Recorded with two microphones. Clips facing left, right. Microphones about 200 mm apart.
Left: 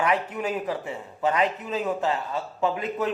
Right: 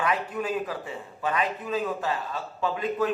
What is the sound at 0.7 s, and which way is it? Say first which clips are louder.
A man's voice: left 4 dB; 20° left (ahead or behind).